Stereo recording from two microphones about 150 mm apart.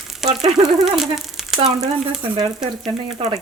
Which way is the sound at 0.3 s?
25° right (ahead or behind).